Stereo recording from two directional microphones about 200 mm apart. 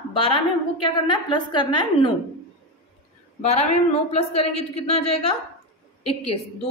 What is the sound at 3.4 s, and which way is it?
A woman's voice, 30° left (ahead or behind).